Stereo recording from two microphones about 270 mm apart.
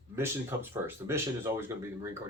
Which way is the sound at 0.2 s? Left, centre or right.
Centre.